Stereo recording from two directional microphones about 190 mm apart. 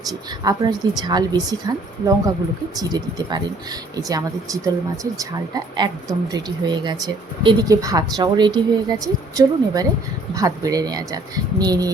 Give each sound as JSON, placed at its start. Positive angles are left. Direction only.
{"t": 0.1, "sound": "speech", "side_deg": -20}